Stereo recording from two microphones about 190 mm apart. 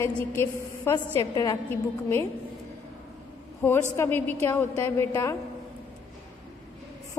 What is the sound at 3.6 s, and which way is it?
A woman's voice, 10° left (ahead or behind).